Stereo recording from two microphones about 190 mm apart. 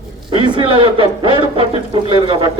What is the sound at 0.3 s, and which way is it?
A man's voice, 25° right (ahead or behind).